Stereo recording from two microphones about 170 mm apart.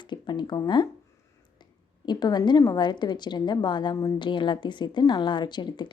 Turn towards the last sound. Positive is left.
turn(degrees=25)  # may be behind; listen again after turning